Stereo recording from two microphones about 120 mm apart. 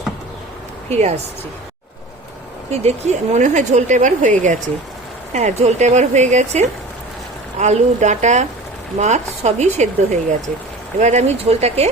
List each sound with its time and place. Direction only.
0.9 s speech: 65° right (ahead or behind)
2.6 s speech: 70° right (ahead or behind); by 4.5 s 90° right
5.3 s speech: 80° right; by 11.9 s 60° right (ahead or behind)